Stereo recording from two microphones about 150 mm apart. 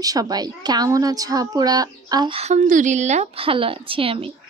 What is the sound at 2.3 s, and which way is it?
Speech, 45° right (ahead or behind).